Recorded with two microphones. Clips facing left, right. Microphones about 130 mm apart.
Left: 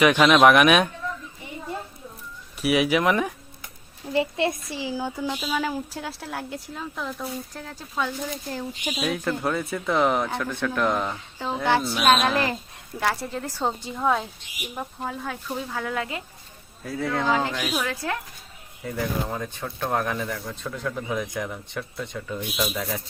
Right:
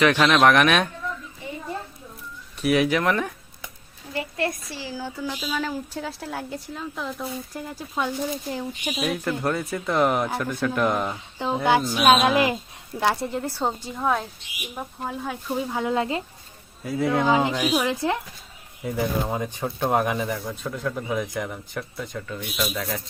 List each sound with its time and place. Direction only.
0.0 s speech: 10° left (ahead or behind)
2.6 s speech: 10° left (ahead or behind)
4.1 s a woman's voice: 25° left (ahead or behind); by 8.6 s 15° right (ahead or behind)
8.9 s a woman's voice: centre (ahead or behind)
11.3 s a woman's voice: 15° right (ahead or behind)
16.8 s speech: 5° right (ahead or behind)